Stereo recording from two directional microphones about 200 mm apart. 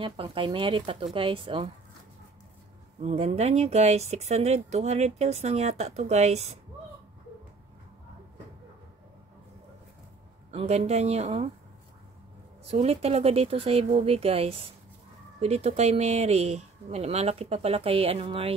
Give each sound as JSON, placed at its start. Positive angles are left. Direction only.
{"t": 0.0, "sound": "speech", "side_deg": -25}
{"t": 3.0, "sound": "speech", "side_deg": -30}
{"t": 10.5, "sound": "speech", "side_deg": -30}
{"t": 12.6, "sound": "speech", "side_deg": -30}